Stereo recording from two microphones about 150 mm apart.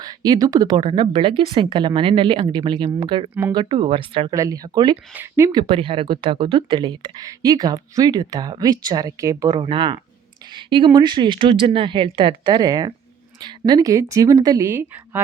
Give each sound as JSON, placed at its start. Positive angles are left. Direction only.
{"t": 0.0, "sound": "speech", "side_deg": -25}
{"t": 4.3, "sound": "speech", "side_deg": -20}
{"t": 5.1, "sound": "speech", "side_deg": -15}
{"t": 5.5, "sound": "speech", "side_deg": -30}